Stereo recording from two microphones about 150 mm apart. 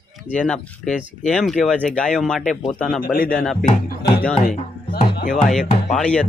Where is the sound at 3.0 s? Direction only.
80° left.